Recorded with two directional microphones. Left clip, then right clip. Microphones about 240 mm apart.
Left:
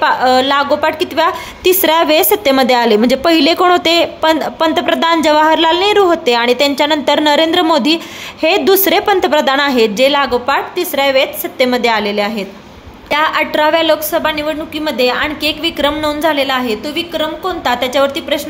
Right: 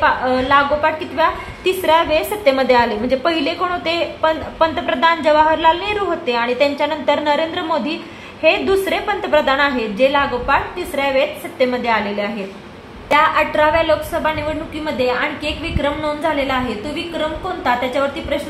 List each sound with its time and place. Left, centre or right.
0.0 s a woman's voice: left